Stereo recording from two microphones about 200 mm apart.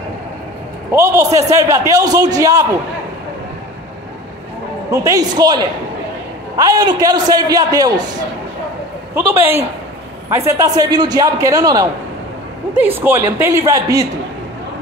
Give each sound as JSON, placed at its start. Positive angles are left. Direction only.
{"t": 0.9, "sound": "a man's voice", "side_deg": -15}
{"t": 4.9, "sound": "a man's voice", "side_deg": -15}
{"t": 9.1, "sound": "a man's voice", "side_deg": -10}